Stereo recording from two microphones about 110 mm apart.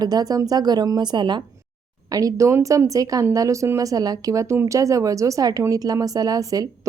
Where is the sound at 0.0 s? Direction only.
35° right (ahead or behind).